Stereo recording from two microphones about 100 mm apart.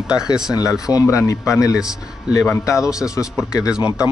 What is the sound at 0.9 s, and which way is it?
Speech, 35° left (ahead or behind).